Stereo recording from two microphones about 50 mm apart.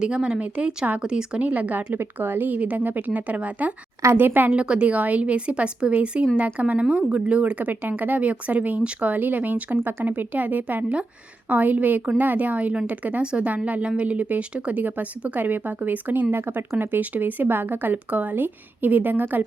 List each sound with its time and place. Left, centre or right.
0.0 s a woman's voice: centre
1.4 s a woman's voice: right
1.9 s speech: right
4.1 s speech: right
4.5 s a woman's voice: right
16.3 s speech: right